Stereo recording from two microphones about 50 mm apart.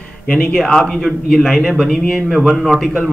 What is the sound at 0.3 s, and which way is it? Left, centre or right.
Speech, left.